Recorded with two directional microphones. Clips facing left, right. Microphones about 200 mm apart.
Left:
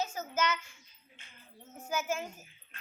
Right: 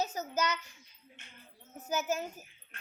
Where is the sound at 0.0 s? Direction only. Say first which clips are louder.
Even; 40° right (ahead or behind).